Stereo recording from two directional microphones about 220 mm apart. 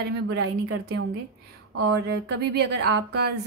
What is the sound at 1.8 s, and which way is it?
A woman's voice, 50° right (ahead or behind).